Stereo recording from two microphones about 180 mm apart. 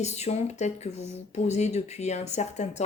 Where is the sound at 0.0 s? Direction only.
35° left (ahead or behind).